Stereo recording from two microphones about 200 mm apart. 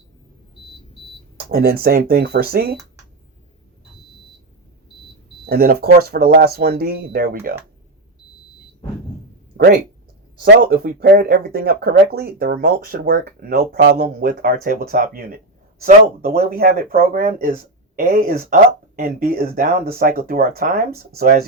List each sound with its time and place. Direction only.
1.4 s speech: 50° right (ahead or behind)
5.5 s speech: 50° right (ahead or behind)
10.4 s speech: 45° right (ahead or behind)